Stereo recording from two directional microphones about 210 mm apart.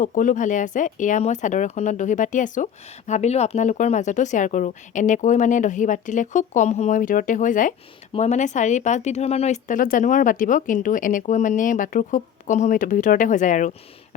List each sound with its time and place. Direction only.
0.0 s speech: 40° left (ahead or behind)